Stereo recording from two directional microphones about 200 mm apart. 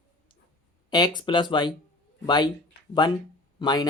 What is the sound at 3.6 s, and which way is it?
Speech, 20° left (ahead or behind).